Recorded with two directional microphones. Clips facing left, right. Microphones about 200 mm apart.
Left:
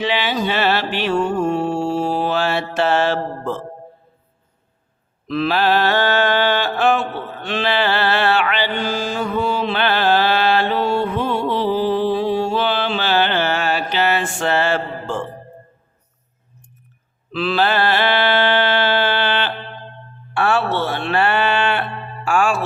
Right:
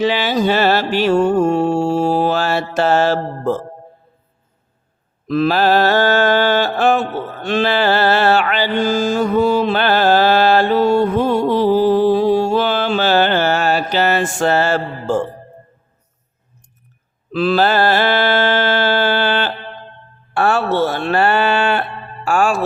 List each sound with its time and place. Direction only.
0.0 s music: 40° right (ahead or behind)
5.3 s mantra: 45° right (ahead or behind)
17.3 s mantra: 40° right (ahead or behind)